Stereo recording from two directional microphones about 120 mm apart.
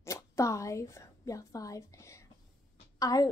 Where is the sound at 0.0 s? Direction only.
25° left (ahead or behind).